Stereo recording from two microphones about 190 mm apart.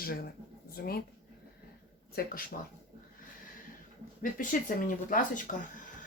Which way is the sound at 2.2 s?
55° left (ahead or behind).